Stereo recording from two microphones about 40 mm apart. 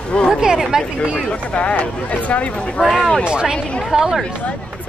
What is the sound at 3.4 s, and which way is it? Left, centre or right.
Speech, centre.